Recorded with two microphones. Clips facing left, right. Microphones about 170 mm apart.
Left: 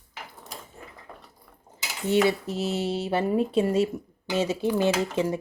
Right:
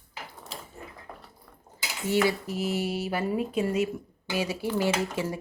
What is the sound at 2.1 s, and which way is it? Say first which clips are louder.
Speech: left 3 dB; 25° left (ahead or behind).